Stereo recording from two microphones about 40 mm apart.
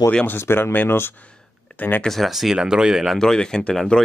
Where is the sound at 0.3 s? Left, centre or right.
Left.